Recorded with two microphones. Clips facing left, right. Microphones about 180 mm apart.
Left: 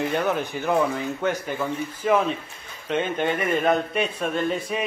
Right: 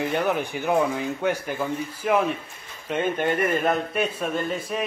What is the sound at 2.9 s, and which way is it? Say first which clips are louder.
A man's voice: even; 5° right (ahead or behind).